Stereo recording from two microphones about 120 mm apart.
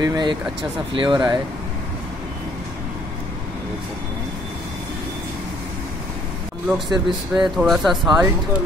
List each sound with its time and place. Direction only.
0.0 s speech: 35° right (ahead or behind)
6.7 s speech: 5° right (ahead or behind)